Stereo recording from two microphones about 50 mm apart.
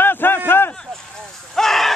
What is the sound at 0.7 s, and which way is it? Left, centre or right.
Vehicle, centre.